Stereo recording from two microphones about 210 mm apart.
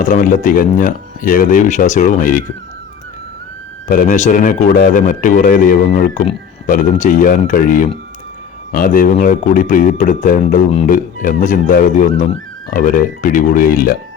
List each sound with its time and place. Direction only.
0.0 s speech: 40° left (ahead or behind)
3.8 s speech: 40° left (ahead or behind)